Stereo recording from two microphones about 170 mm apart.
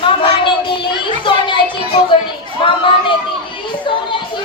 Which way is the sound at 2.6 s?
30° left (ahead or behind).